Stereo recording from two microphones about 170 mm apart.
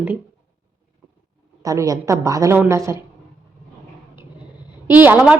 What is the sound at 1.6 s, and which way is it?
A woman's voice, 20° right (ahead or behind).